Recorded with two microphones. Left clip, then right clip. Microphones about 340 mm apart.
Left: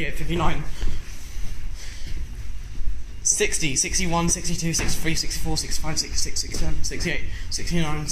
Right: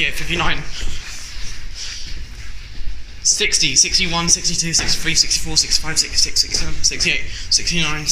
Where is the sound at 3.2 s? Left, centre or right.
Left.